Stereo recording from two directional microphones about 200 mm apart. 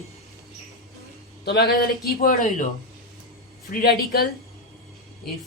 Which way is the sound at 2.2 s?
45° left (ahead or behind).